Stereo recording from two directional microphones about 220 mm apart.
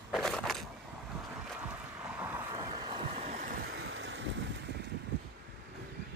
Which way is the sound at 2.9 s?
25° right (ahead or behind).